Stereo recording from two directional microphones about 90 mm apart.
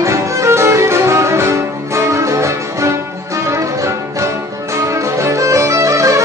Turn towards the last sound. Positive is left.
turn(degrees=-35)  # may be behind; listen again after turning